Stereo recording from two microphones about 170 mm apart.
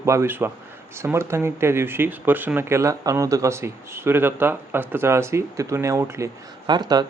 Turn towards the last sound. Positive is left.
turn(degrees=-25)  # may be behind; listen again after turning